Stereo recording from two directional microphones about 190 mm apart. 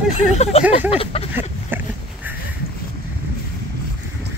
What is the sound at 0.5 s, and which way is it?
Speech, 35° left (ahead or behind).